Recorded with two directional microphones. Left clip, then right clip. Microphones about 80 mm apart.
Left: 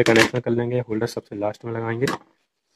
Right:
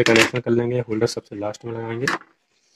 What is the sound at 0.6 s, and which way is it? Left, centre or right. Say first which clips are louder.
Speech: right 2 dB; right.